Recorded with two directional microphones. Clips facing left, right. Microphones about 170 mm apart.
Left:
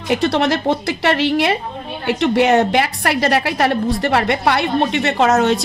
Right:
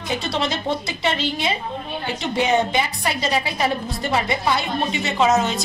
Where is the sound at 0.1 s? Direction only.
65° left (ahead or behind).